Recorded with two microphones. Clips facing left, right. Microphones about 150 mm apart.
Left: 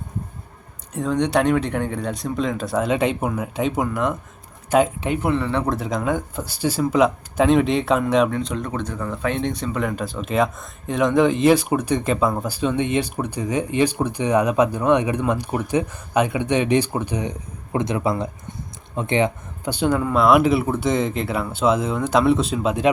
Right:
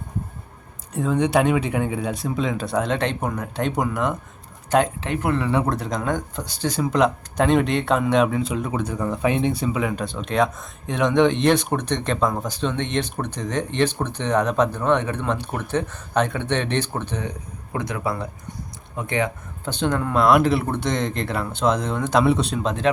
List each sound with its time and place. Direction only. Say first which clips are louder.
0.9 s speech: even; 5° right (ahead or behind); by 19.7 s 20° left (ahead or behind)
19.7 s speech: left 2 dB; 10° left (ahead or behind)